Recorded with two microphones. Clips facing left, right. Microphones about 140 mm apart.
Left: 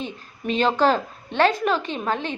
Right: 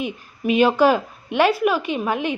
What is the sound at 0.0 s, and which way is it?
A woman's voice, 10° right (ahead or behind).